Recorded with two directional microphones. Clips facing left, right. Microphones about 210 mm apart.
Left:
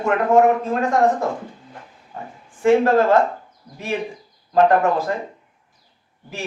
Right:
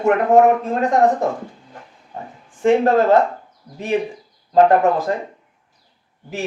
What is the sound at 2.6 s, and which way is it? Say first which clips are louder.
Speech: even; 20° right (ahead or behind).